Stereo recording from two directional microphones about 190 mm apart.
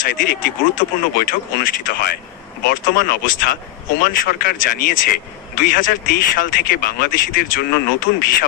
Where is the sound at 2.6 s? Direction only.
55° left (ahead or behind).